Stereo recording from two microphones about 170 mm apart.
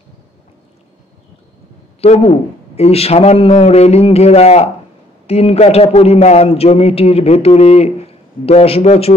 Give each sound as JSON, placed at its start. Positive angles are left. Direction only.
{"t": 2.0, "sound": "a man's voice", "side_deg": 35}